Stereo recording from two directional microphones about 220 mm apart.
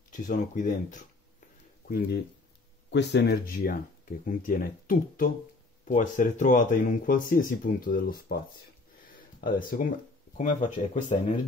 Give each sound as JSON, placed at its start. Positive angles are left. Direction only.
{"t": 0.1, "sound": "speech", "side_deg": 35}
{"t": 2.9, "sound": "speech", "side_deg": 50}